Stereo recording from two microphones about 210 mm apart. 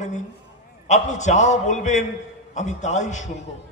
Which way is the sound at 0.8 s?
35° left (ahead or behind).